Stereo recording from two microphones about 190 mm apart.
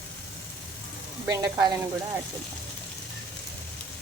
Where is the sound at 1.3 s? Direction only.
20° right (ahead or behind).